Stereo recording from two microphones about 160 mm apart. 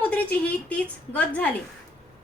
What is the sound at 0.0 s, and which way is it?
A woman's voice, 10° left (ahead or behind).